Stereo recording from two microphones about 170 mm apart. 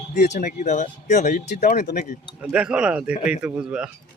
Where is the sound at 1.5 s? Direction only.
65° left (ahead or behind).